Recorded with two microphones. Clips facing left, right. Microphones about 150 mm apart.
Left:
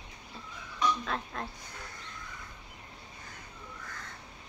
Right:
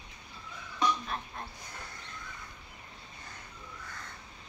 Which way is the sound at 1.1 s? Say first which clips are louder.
Left 3 dB; 90° left.